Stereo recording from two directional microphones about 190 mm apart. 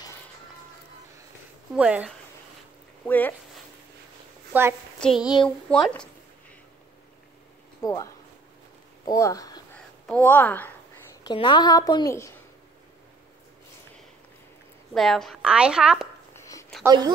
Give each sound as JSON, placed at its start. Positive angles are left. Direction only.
{"t": 1.8, "sound": "speech", "side_deg": -5}
{"t": 3.1, "sound": "speech", "side_deg": 10}
{"t": 4.5, "sound": "a woman's voice", "side_deg": -10}
{"t": 5.0, "sound": "speech", "side_deg": 0}
{"t": 7.8, "sound": "speech", "side_deg": 20}
{"t": 9.8, "sound": "speech", "side_deg": 5}
{"t": 11.2, "sound": "a woman's voice", "side_deg": 25}
{"t": 15.0, "sound": "speech", "side_deg": 0}
{"t": 16.3, "sound": "a sound", "side_deg": 15}
{"t": 16.8, "sound": "speech", "side_deg": -20}